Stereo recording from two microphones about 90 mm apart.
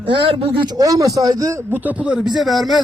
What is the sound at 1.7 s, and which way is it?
Speech, 20° right (ahead or behind).